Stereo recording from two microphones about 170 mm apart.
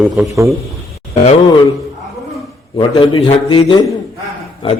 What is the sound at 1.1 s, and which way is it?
Speech, 40° left (ahead or behind).